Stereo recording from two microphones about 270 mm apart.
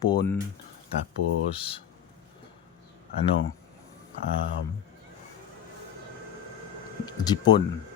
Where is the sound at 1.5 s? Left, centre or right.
Centre.